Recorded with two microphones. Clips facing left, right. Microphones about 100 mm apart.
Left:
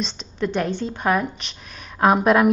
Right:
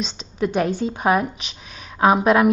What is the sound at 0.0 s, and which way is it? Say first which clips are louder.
A woman's voice: right 2 dB; 10° right (ahead or behind).